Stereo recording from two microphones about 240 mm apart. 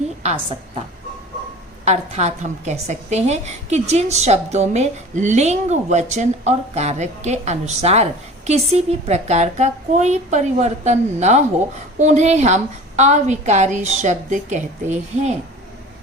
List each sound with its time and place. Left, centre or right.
1.8 s a woman's voice: right